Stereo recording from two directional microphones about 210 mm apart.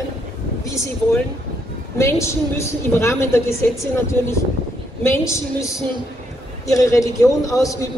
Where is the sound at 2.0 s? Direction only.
15° left (ahead or behind).